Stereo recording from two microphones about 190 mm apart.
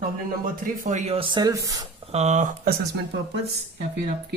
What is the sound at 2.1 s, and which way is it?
Speech, 35° right (ahead or behind).